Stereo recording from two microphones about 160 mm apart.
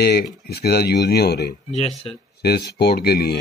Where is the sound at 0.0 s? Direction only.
80° left.